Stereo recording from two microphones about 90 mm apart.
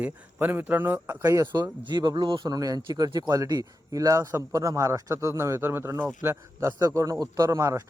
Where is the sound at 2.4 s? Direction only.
40° right (ahead or behind).